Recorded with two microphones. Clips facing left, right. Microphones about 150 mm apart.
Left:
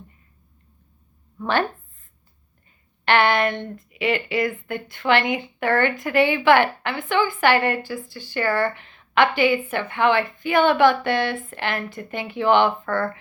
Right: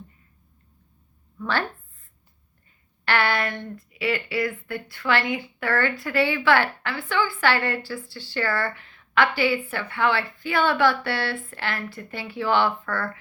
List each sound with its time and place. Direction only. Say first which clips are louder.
3.0 s a woman's voice: left 5 dB; 20° left (ahead or behind)